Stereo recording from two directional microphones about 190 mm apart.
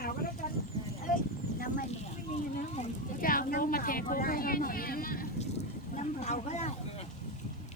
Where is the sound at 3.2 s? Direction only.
45° left (ahead or behind).